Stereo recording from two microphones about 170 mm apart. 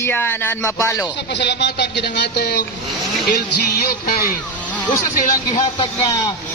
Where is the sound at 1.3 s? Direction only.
90° left; by 4.2 s 65° left (ahead or behind).